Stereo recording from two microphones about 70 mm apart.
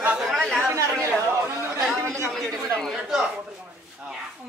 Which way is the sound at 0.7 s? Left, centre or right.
Right.